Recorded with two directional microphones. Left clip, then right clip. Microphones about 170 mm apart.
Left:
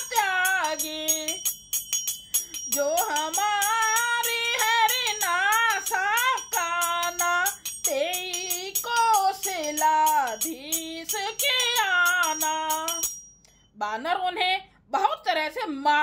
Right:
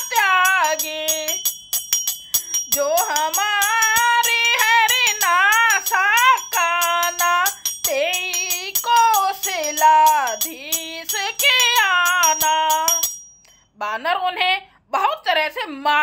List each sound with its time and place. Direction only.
0.1 s music: 15° left (ahead or behind)
2.7 s music: 20° left (ahead or behind)
7.8 s child singing: 15° left (ahead or behind)
11.1 s music: 15° left (ahead or behind)
13.7 s a sound: 15° left (ahead or behind)